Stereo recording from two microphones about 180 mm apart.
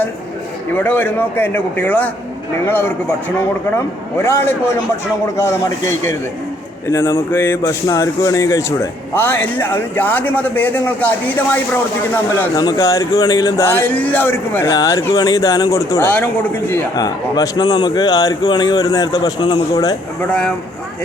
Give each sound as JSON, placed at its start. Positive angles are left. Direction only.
{"t": 0.7, "sound": "speech", "side_deg": 10}
{"t": 4.2, "sound": "a man's voice", "side_deg": 15}